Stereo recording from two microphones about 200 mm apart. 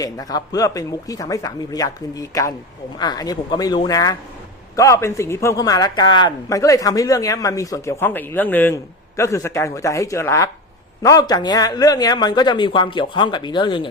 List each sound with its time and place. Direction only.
0.0 s a man's voice: 20° left (ahead or behind)